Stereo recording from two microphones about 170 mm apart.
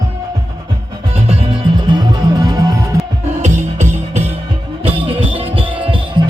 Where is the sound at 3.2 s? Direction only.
45° right (ahead or behind).